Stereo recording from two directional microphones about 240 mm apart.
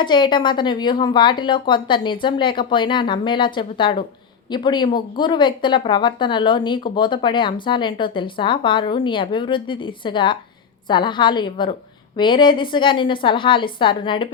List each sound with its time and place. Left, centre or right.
0.0 s speech: centre